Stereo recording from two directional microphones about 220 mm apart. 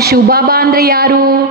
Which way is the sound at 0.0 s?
45° right (ahead or behind).